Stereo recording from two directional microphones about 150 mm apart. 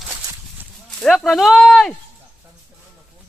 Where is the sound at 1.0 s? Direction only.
Centre (ahead or behind).